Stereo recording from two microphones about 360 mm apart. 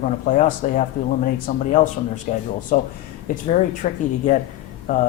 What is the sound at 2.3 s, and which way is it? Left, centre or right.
Speech, left.